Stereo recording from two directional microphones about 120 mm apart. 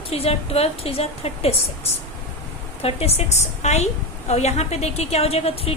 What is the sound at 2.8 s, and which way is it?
A woman's voice, 60° left (ahead or behind).